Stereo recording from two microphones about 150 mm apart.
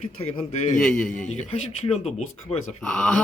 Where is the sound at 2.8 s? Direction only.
5° left (ahead or behind).